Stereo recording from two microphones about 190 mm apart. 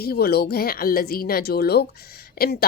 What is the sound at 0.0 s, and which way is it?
Speech, 55° left (ahead or behind).